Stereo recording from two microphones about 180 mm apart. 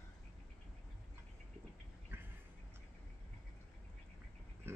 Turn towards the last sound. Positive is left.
turn(degrees=-15)  # may be behind; listen again after turning